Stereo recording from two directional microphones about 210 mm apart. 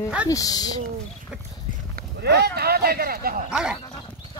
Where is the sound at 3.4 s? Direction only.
5° right (ahead or behind).